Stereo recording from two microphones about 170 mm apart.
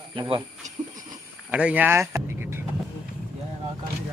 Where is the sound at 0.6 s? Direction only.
45° right (ahead or behind).